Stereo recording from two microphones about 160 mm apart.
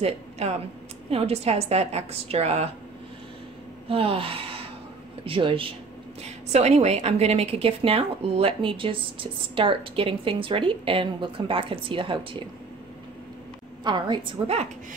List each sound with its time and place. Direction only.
0.0 s a woman's voice: 40° right (ahead or behind)
3.9 s a woman's voice: 35° right (ahead or behind)
13.8 s a woman's voice: 30° right (ahead or behind)